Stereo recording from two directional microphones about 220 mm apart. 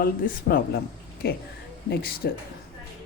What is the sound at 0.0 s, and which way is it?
Speech, 40° left (ahead or behind).